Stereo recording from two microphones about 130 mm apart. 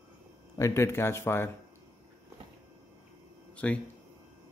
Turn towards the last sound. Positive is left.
turn(degrees=10)  # may be behind; listen again after turning